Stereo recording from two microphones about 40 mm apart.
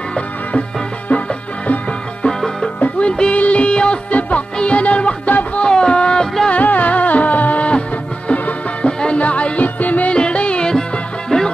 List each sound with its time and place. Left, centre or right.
0.5 s music: left
2.2 s music: centre
3.0 s music: left
4.1 s music: left
5.6 s a sound: left
6.5 s music: left
10.1 s music: left
10.7 s music: centre